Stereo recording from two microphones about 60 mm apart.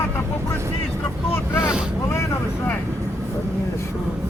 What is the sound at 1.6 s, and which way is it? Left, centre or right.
Speech, centre.